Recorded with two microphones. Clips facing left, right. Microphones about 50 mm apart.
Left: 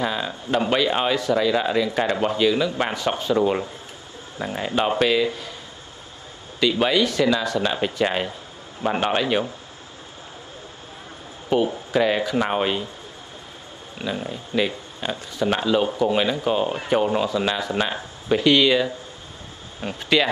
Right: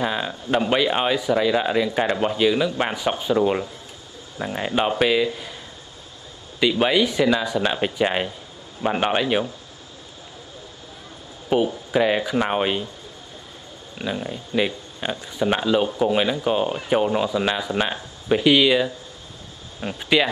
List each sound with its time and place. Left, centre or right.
0.0 s speech: centre
6.6 s a man's voice: centre
9.2 s speech: centre
11.5 s speech: centre
13.9 s speech: centre